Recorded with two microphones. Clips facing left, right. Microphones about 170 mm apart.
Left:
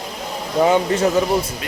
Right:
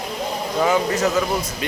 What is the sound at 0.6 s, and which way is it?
Speech, 30° left (ahead or behind).